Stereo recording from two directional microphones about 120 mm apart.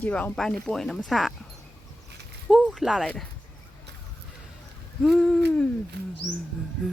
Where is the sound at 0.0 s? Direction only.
10° left (ahead or behind).